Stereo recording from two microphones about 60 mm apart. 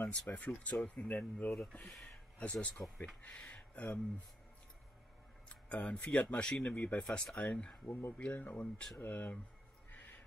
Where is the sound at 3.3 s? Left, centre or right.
Centre.